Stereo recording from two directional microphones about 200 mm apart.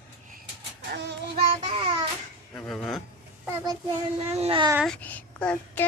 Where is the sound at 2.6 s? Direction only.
5° left (ahead or behind).